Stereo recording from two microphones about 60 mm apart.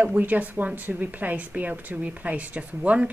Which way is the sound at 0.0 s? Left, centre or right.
Right.